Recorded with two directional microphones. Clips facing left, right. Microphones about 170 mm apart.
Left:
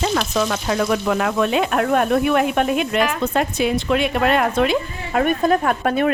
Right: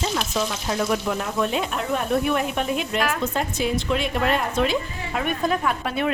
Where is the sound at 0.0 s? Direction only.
70° left (ahead or behind).